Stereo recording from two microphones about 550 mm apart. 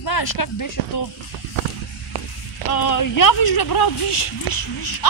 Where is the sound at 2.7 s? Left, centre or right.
Left.